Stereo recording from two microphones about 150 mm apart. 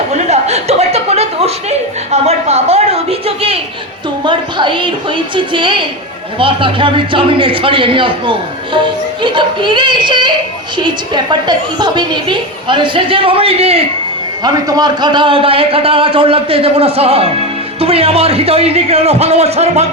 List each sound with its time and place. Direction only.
0.1 s chuckle: 45° right (ahead or behind)
2.0 s a woman's voice: 45° right (ahead or behind)
14.4 s a man's voice: 25° right (ahead or behind); by 19.9 s 45° right (ahead or behind)